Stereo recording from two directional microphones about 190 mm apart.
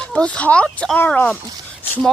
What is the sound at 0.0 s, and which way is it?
Speech, 5° left (ahead or behind).